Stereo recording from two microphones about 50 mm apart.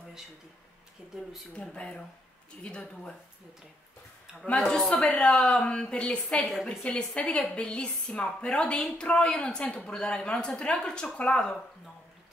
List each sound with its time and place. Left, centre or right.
1.5 s speech: left
4.6 s speech: centre
6.4 s a woman's voice: centre
6.8 s speech: left